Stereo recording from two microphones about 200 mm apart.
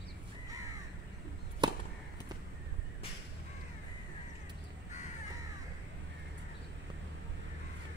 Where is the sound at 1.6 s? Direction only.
20° right (ahead or behind).